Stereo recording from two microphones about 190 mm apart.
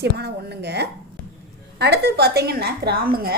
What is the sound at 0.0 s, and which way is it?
A woman's voice, 60° right (ahead or behind).